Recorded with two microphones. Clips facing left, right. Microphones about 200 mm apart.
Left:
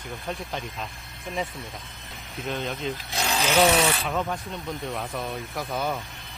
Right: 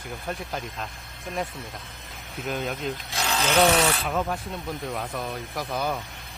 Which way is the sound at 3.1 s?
15° left (ahead or behind).